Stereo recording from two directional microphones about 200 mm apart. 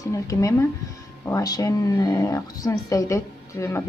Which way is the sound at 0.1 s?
15° left (ahead or behind).